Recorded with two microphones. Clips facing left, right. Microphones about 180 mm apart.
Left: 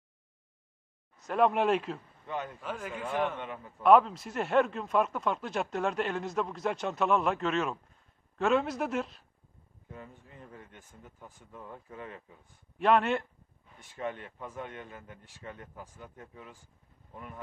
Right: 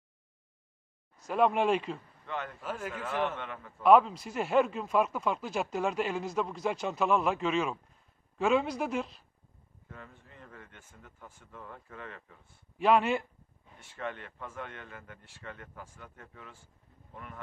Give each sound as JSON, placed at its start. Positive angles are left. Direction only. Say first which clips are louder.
{"t": 1.3, "sound": "speech", "louder": "even", "side_deg": 0}
{"t": 2.2, "sound": "speech", "louder": "left 1 dB", "side_deg": 15}
{"t": 2.6, "sound": "speech", "louder": "even", "side_deg": -5}
{"t": 3.0, "sound": "speech", "louder": "left 2 dB", "side_deg": 10}
{"t": 3.8, "sound": "speech", "louder": "even", "side_deg": 0}
{"t": 9.9, "sound": "speech", "louder": "left 3 dB", "side_deg": 15}
{"t": 12.7, "sound": "speech", "louder": "even", "side_deg": -5}
{"t": 13.7, "sound": "speech", "louder": "left 2 dB", "side_deg": 15}